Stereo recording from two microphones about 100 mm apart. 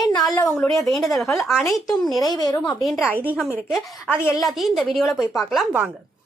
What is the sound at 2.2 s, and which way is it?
Speech, 40° left (ahead or behind).